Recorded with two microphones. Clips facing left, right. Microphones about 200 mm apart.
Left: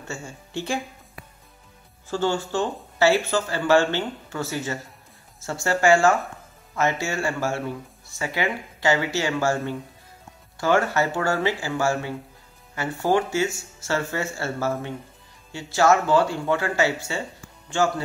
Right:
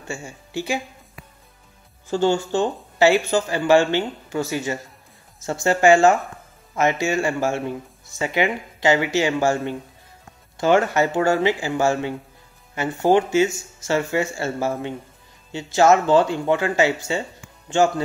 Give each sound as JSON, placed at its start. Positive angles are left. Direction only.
{"t": 0.1, "sound": "speech", "side_deg": -10}
{"t": 2.0, "sound": "speech", "side_deg": -15}